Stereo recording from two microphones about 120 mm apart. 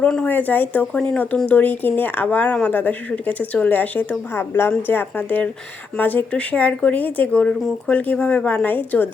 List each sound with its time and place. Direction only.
0.0 s speech: 10° left (ahead or behind)